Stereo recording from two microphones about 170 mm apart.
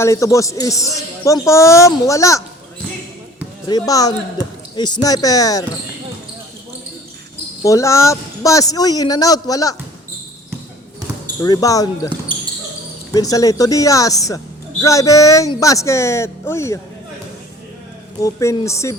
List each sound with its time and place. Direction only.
0.0 s speech: 20° left (ahead or behind)
3.7 s speech: 20° left (ahead or behind)
7.6 s speech: 20° left (ahead or behind)
11.4 s speech: 20° left (ahead or behind)
13.1 s speech: 20° left (ahead or behind)
18.2 s speech: 20° left (ahead or behind)